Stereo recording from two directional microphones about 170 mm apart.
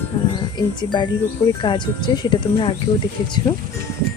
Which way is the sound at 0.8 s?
25° left (ahead or behind).